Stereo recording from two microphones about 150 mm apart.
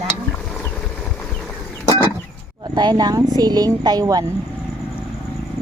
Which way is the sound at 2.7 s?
30° right (ahead or behind).